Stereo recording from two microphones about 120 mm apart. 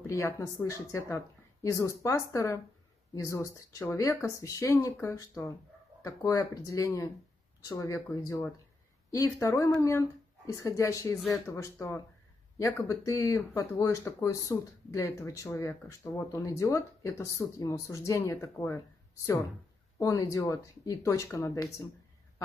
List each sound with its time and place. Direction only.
0.0 s speech: 25° left (ahead or behind)
20.0 s speech: 30° left (ahead or behind)